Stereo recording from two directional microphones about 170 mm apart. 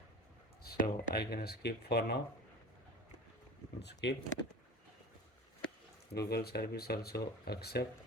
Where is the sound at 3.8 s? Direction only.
85° left.